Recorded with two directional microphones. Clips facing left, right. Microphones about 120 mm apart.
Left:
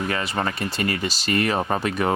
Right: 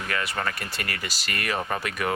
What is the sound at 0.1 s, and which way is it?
Speech, 25° left (ahead or behind).